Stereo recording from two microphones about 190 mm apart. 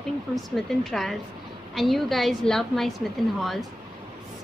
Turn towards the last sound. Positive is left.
turn(degrees=0)  # may be behind; listen again after turning